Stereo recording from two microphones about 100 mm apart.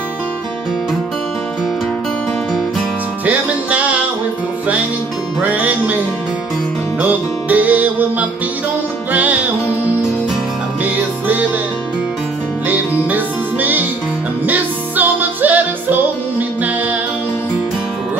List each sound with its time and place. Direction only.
3.3 s music: 15° right (ahead or behind)
5.4 s music: 15° right (ahead or behind)
12.6 s music: 15° right (ahead or behind)